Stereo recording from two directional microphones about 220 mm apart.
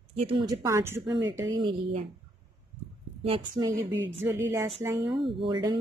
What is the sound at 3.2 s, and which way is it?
Speech, 25° right (ahead or behind).